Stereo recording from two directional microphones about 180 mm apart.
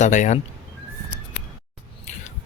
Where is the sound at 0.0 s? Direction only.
40° left (ahead or behind).